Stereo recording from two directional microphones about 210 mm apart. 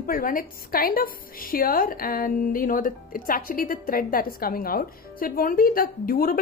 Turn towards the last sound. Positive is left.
turn(degrees=45)  # may be behind; listen again after turning